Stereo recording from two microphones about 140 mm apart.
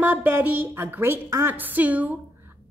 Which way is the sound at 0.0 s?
15° right (ahead or behind).